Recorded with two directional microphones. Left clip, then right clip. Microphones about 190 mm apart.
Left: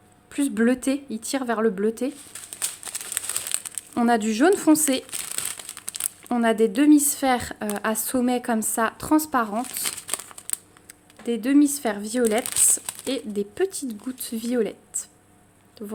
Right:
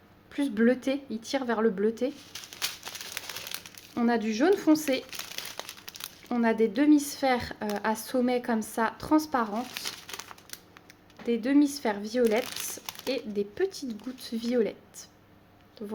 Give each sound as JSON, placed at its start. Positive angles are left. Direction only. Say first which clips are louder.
{"t": 0.3, "sound": "speech", "louder": "left 3 dB", "side_deg": 25}
{"t": 3.5, "sound": "speech", "louder": "left 7 dB", "side_deg": 35}
{"t": 11.3, "sound": "speech", "louder": "left 5 dB", "side_deg": 25}